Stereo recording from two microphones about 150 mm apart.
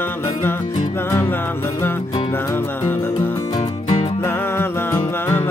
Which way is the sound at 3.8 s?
35° left (ahead or behind).